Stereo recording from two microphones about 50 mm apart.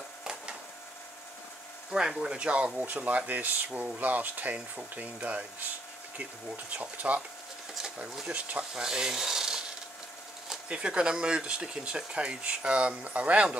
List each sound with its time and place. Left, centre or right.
0.2 s printer: centre
1.9 s speech: centre
2.3 s speech: right
8.3 s speech: right
8.7 s speech: centre
10.7 s speech: centre